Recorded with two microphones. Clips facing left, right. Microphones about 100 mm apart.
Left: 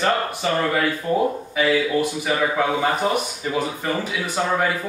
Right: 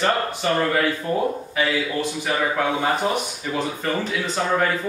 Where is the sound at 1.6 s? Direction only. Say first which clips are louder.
Left 4 dB; 10° left (ahead or behind).